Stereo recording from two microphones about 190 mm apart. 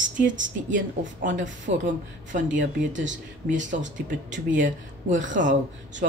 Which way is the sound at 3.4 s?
40° right (ahead or behind).